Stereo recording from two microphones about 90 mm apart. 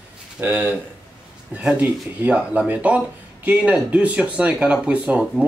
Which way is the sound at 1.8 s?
20° right (ahead or behind).